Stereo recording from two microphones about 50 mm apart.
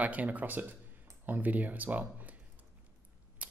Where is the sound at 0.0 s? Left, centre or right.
Right.